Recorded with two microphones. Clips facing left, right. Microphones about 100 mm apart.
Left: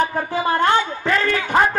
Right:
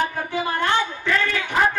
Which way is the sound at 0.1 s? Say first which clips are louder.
Left 5 dB; 35° left (ahead or behind).